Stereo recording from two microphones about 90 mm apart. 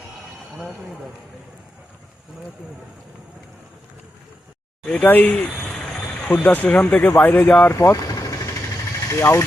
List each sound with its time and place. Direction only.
4.9 s a sound: 20° left (ahead or behind)
6.3 s speech: 20° left (ahead or behind)
7.7 s vehicle: 35° left (ahead or behind)
9.0 s speech: 30° left (ahead or behind)